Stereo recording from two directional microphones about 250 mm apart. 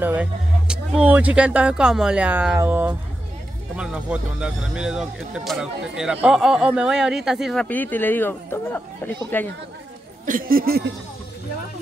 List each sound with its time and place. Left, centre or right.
0.0 s speech: centre
10.2 s speech: right